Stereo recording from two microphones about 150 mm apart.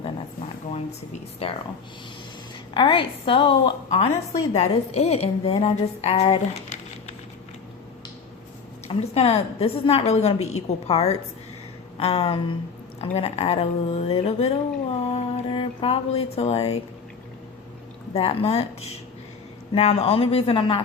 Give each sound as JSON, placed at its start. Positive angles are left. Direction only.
{"t": 0.7, "sound": "a woman's voice", "side_deg": 45}
{"t": 2.7, "sound": "speech", "side_deg": 35}
{"t": 3.8, "sound": "a woman's voice", "side_deg": 45}
{"t": 8.9, "sound": "a woman's voice", "side_deg": 45}
{"t": 18.1, "sound": "speech", "side_deg": 40}